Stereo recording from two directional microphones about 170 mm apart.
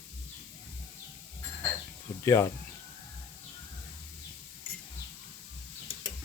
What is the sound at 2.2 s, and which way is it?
Speech, 15° left (ahead or behind).